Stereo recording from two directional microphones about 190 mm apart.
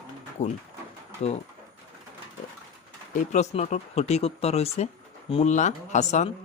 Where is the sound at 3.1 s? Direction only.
40° left (ahead or behind).